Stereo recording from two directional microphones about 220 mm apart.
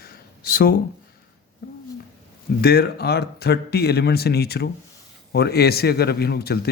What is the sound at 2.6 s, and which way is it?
Speech, 45° left (ahead or behind).